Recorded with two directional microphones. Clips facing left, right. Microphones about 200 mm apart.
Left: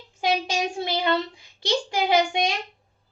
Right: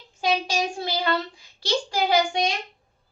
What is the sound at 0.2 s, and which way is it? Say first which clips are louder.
Child singing: even; 20° left (ahead or behind).